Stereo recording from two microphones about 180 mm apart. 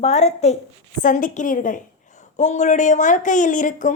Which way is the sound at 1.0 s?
50° left (ahead or behind).